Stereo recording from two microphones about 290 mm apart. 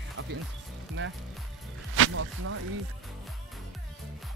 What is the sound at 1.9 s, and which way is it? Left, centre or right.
Speech, right.